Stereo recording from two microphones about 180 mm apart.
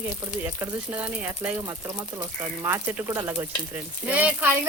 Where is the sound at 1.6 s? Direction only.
20° right (ahead or behind).